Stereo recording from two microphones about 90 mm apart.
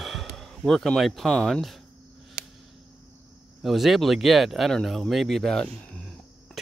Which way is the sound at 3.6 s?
Centre (ahead or behind).